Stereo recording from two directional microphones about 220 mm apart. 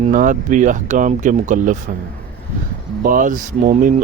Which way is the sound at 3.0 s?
35° right (ahead or behind).